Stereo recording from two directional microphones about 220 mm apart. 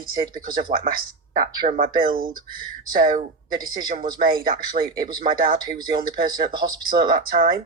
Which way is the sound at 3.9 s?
40° right (ahead or behind).